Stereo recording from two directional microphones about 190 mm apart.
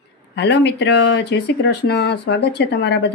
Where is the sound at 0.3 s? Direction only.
65° left (ahead or behind).